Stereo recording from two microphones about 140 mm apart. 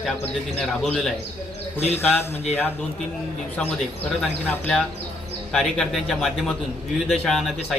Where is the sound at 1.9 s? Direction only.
15° left (ahead or behind).